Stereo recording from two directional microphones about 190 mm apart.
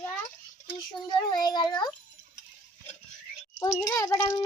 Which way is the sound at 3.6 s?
15° left (ahead or behind).